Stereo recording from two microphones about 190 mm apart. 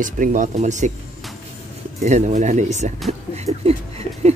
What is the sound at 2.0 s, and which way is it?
Speech, 40° right (ahead or behind).